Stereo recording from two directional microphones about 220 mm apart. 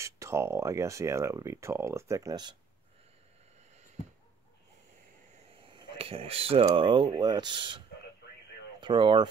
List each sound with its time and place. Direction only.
0.0 s speech: 10° right (ahead or behind)
5.5 s speech: 25° right (ahead or behind)
8.8 s speech: 20° right (ahead or behind)